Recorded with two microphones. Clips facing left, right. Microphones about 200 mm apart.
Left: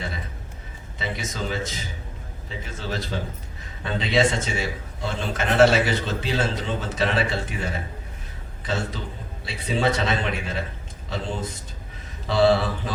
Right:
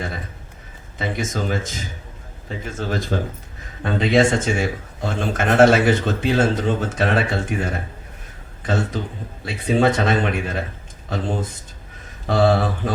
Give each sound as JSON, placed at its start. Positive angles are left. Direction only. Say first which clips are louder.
{"t": 0.9, "sound": "speech", "louder": "right 6 dB", "side_deg": -50}